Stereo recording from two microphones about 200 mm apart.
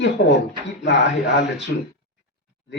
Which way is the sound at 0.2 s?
55° left (ahead or behind).